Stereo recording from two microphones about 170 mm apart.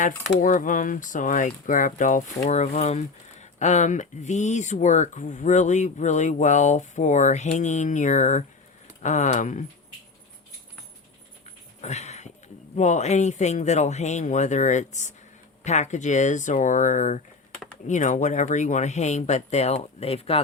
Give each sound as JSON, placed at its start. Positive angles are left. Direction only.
{"t": 0.3, "sound": "speech", "side_deg": 50}
{"t": 11.8, "sound": "a sound", "side_deg": 40}
{"t": 12.7, "sound": "speech", "side_deg": 45}